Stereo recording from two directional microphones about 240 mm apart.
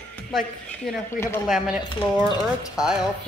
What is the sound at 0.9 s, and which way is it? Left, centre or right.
Speech, centre.